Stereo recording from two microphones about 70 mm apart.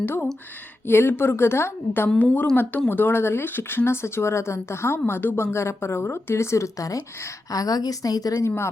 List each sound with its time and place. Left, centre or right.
0.0 s speech: left
2.0 s speech: centre
2.9 s a woman's voice: left
8.4 s speech: left